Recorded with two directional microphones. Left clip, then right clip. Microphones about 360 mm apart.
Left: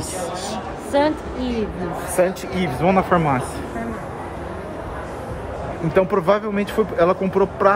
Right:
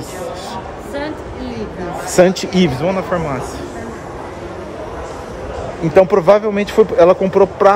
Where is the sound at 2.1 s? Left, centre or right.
Right.